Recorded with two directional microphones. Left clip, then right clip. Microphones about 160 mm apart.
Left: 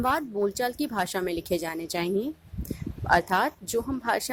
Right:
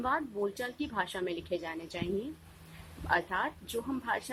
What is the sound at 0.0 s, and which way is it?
Speech, 40° left (ahead or behind).